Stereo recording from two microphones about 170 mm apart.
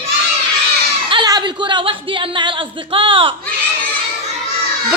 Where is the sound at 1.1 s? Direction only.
25° right (ahead or behind).